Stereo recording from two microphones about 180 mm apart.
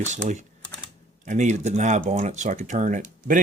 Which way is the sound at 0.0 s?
40° right (ahead or behind).